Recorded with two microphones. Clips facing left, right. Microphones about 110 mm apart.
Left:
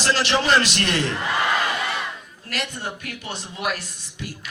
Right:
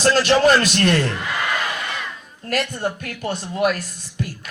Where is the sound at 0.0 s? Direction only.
45° right (ahead or behind).